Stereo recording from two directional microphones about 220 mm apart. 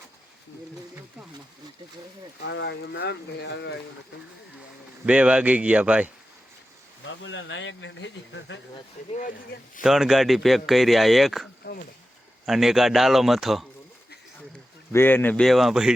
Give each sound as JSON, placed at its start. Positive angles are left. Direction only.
{"t": 2.4, "sound": "speech", "side_deg": 55}
{"t": 5.0, "sound": "speech", "side_deg": -5}
{"t": 7.0, "sound": "speech", "side_deg": 60}
{"t": 9.1, "sound": "speech", "side_deg": 35}
{"t": 9.8, "sound": "speech", "side_deg": 0}
{"t": 11.6, "sound": "speech", "side_deg": 40}
{"t": 12.5, "sound": "speech", "side_deg": 0}
{"t": 14.9, "sound": "speech", "side_deg": 10}